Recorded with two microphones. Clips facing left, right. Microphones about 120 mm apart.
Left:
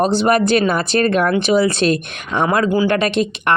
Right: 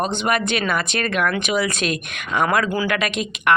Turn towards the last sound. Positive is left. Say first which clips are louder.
# left 4 dB
turn(degrees=35)  # may be behind; listen again after turning